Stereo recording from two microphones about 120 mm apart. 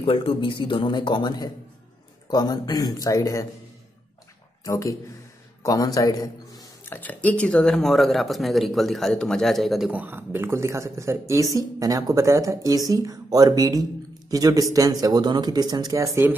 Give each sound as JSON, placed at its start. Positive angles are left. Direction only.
{"t": 0.0, "sound": "a man's voice", "side_deg": 50}
{"t": 4.6, "sound": "a man's voice", "side_deg": 25}
{"t": 6.8, "sound": "speech", "side_deg": 15}
{"t": 9.8, "sound": "speech", "side_deg": -15}